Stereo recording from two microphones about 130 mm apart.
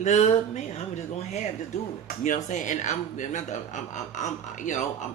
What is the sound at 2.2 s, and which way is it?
Speech, 75° left (ahead or behind).